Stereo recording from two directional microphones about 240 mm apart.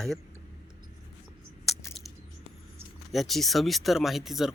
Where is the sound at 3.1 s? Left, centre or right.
Centre.